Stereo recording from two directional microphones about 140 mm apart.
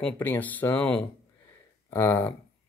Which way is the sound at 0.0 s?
15° left (ahead or behind).